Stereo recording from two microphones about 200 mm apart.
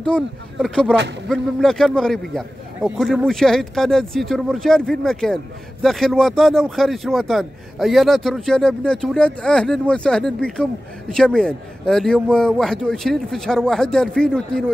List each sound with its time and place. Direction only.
0.0 s a man's voice: 5° left (ahead or behind)